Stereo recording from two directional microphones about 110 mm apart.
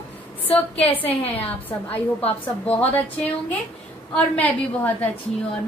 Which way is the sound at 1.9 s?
65° left (ahead or behind).